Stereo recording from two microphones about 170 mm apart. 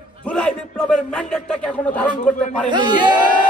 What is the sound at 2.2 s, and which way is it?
Speech, 45° left (ahead or behind).